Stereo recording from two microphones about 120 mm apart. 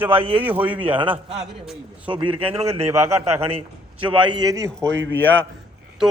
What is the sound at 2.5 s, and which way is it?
Speech, 55° right (ahead or behind).